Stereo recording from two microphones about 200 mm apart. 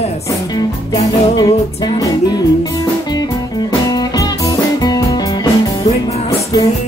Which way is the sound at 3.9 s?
20° left (ahead or behind).